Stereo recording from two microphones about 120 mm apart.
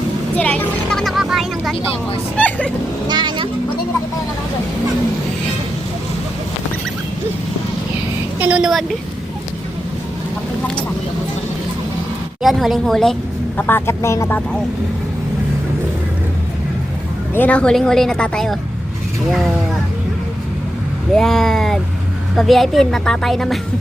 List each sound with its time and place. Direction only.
0.3 s speech: 10° left (ahead or behind)
2.3 s speech: 10° left (ahead or behind)
3.1 s speech: 40° right (ahead or behind)
8.4 s a woman's voice: 10° right (ahead or behind)
12.4 s a woman's voice: centre (ahead or behind)
13.6 s speech: 15° left (ahead or behind)
17.3 s a woman's voice: 10° left (ahead or behind)
21.2 s a woman's voice: 5° left (ahead or behind)